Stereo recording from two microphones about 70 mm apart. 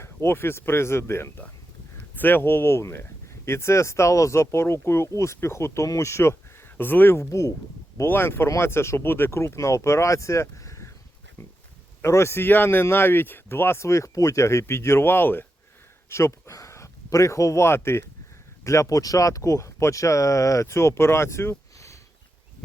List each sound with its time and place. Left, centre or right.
0.0 s speech: left
6.7 s speech: left
7.2 s speech: left
8.0 s speech: left
12.0 s speech: left
16.0 s speech: left
18.6 s speech: left